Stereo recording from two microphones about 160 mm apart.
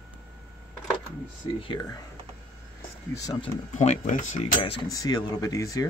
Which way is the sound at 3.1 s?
20° left (ahead or behind).